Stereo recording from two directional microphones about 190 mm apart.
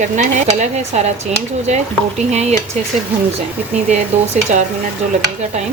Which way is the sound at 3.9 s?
40° right (ahead or behind).